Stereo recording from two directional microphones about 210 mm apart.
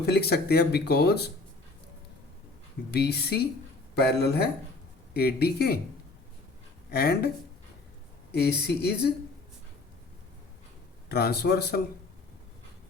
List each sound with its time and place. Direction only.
0.0 s speech: 50° left (ahead or behind)
2.9 s speech: 50° left (ahead or behind)
6.9 s speech: 50° left (ahead or behind)
8.3 s speech: 50° left (ahead or behind)
11.1 s speech: 50° left (ahead or behind)